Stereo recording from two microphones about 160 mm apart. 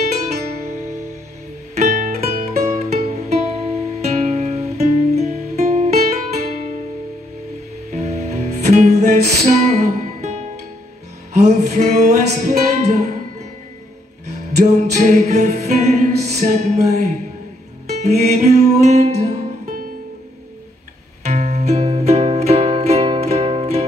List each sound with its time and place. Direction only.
1.8 s music: 50° right (ahead or behind)
7.9 s music: 45° right (ahead or behind)
14.6 s music: 45° right (ahead or behind)
21.3 s music: 45° right (ahead or behind)